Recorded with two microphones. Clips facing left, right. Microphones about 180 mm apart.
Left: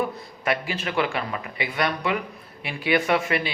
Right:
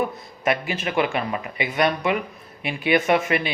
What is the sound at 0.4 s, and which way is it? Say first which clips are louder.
Speech: right 3 dB; 20° right (ahead or behind).